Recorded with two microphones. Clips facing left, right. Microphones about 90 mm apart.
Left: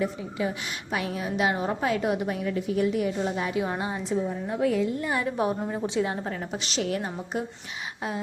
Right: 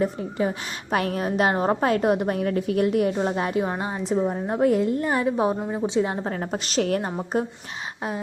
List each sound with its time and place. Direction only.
0.0 s a woman's voice: 45° right (ahead or behind)
3.7 s a woman's voice: 30° right (ahead or behind)
4.2 s a woman's voice: 50° right (ahead or behind)
5.2 s a woman's voice: 25° right (ahead or behind)
5.5 s a woman's voice: 15° right (ahead or behind)
6.2 s a woman's voice: 40° right (ahead or behind)